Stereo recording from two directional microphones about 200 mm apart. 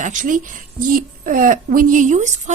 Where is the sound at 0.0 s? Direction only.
40° right (ahead or behind).